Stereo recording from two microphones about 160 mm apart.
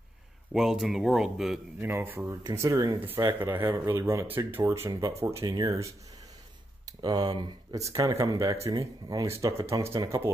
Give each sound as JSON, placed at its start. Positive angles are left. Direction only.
{"t": 0.5, "sound": "speech", "side_deg": -5}
{"t": 1.8, "sound": "speech", "side_deg": -15}